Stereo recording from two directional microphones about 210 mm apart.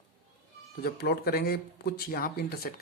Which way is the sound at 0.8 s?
50° left (ahead or behind).